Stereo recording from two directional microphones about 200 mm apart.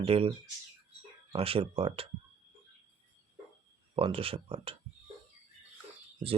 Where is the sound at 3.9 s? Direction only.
30° right (ahead or behind).